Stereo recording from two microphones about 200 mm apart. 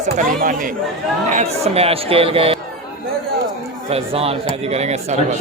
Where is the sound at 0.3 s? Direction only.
45° right (ahead or behind).